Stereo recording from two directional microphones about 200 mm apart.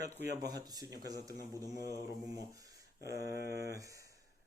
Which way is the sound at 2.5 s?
15° right (ahead or behind).